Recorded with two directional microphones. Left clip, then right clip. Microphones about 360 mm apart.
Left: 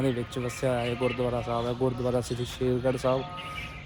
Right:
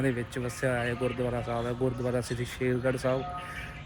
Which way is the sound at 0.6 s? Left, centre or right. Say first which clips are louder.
Left 2 dB; centre.